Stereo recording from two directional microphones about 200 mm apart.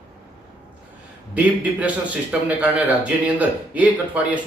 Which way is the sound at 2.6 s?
5° right (ahead or behind).